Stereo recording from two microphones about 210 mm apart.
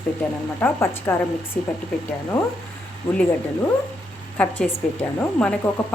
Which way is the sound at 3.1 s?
25° left (ahead or behind).